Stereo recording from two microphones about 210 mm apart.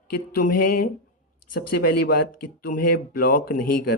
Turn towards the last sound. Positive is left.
turn(degrees=45)  # may be behind; listen again after turning